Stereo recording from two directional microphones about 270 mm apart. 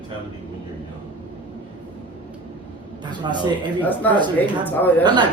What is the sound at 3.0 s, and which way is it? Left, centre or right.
Speech, centre.